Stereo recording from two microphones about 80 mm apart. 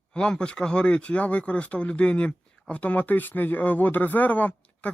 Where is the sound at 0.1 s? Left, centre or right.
Centre.